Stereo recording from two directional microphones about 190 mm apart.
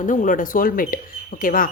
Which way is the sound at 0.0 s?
45° left (ahead or behind).